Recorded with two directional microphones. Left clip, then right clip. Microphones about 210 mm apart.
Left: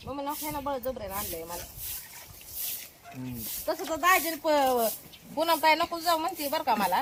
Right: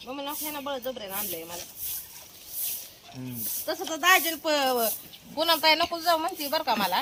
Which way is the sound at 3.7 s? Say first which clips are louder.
Right 2 dB; 20° left (ahead or behind).